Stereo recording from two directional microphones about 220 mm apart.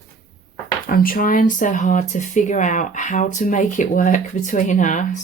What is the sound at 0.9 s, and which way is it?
Speech, 40° left (ahead or behind).